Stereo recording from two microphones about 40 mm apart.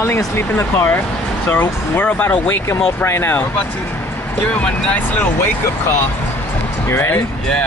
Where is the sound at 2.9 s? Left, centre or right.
Left.